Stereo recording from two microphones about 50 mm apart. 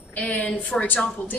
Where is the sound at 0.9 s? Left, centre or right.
Left.